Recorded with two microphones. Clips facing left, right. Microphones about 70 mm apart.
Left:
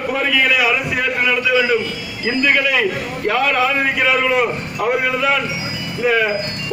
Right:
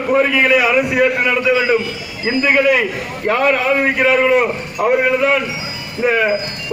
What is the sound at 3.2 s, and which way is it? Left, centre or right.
A man's voice, right.